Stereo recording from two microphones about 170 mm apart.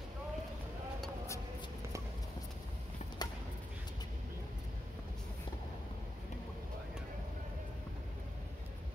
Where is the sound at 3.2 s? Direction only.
25° left (ahead or behind).